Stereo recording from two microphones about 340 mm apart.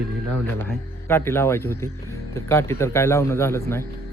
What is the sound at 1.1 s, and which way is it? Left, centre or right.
A man's voice, centre.